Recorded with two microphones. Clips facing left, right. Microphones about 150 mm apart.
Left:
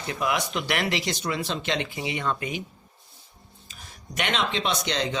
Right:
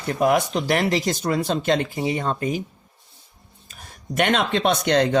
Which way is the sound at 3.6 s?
50° right (ahead or behind).